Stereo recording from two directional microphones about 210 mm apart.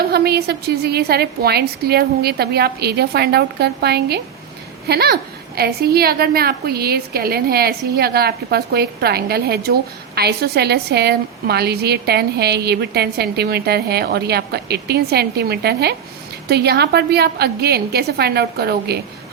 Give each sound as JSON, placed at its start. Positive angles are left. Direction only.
{"t": 0.0, "sound": "a woman's voice", "side_deg": -50}